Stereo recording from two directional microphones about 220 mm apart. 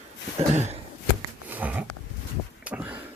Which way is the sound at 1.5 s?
5° right (ahead or behind).